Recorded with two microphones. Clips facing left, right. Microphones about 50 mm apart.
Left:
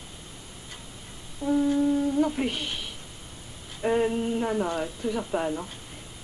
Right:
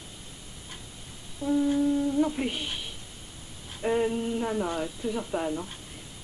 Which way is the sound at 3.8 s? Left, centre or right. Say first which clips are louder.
Left 2 dB; centre.